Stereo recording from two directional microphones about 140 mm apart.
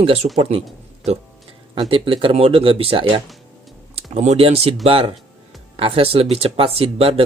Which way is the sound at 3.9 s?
55° right (ahead or behind).